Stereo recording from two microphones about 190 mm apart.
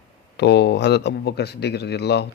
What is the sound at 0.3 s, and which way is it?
Speech, 60° left (ahead or behind).